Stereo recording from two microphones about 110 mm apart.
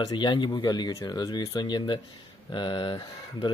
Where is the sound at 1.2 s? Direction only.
40° left (ahead or behind).